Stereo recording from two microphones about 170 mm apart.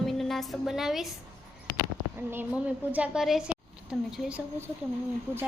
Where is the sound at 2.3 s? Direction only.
10° right (ahead or behind).